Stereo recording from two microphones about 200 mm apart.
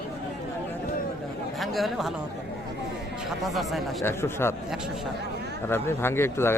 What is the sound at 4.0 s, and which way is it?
Speech, 10° left (ahead or behind).